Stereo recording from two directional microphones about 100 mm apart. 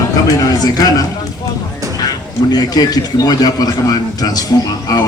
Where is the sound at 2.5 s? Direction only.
40° left (ahead or behind).